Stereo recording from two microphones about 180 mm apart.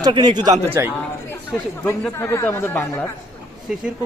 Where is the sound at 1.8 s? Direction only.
10° left (ahead or behind).